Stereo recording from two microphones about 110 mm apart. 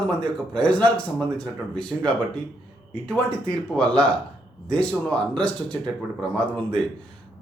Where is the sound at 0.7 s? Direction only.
15° left (ahead or behind).